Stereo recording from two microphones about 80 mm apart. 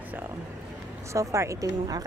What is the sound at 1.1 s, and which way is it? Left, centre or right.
Speech, right.